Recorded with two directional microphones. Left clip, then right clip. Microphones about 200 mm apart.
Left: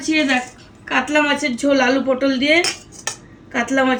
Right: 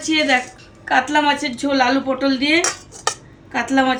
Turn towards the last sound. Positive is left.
turn(degrees=-30)  # may be behind; listen again after turning